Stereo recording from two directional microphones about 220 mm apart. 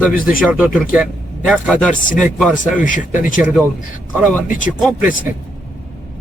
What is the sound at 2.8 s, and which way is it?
Speech, 35° left (ahead or behind).